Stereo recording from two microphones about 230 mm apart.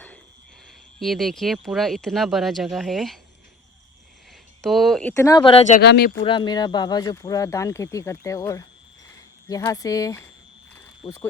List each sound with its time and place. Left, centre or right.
0.9 s speech: centre
4.6 s speech: centre
5.2 s speech: centre
5.8 s speech: left
6.2 s speech: centre